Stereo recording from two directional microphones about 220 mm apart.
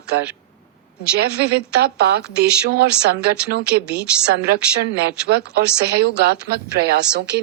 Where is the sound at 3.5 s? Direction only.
45° right (ahead or behind).